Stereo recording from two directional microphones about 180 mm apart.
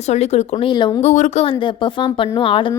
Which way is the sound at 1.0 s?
40° left (ahead or behind).